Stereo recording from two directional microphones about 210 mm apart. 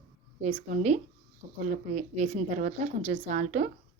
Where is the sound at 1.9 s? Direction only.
35° right (ahead or behind).